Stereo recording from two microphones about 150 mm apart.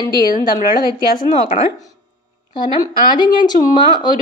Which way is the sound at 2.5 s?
30° left (ahead or behind).